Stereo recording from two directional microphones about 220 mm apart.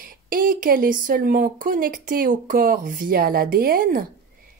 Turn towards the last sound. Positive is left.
turn(degrees=-40)  # may be behind; listen again after turning